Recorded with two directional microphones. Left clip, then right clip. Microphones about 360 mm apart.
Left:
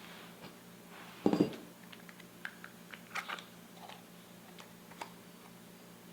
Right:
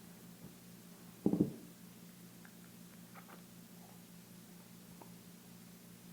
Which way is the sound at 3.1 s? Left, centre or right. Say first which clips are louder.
Left 18 dB; centre.